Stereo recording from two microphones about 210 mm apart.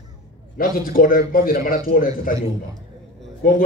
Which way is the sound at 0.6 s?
45° left (ahead or behind).